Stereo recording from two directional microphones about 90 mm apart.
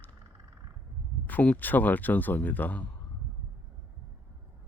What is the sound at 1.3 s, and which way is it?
Speech, 20° left (ahead or behind).